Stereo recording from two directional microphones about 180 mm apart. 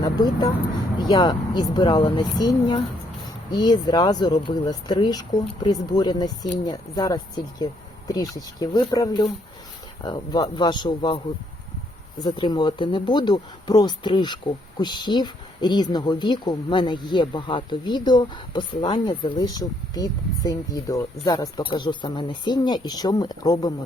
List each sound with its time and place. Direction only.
0.0 s vehicle: 25° left (ahead or behind)
0.9 s a woman's voice: 25° left (ahead or behind)
12.2 s a woman's voice: 25° left (ahead or behind)